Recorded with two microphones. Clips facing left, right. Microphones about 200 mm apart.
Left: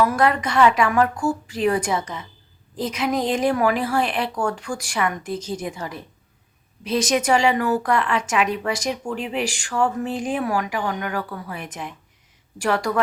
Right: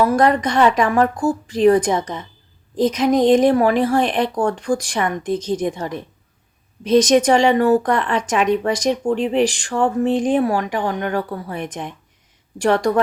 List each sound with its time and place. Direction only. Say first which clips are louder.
0.0 s speech: right 4 dB; 35° right (ahead or behind)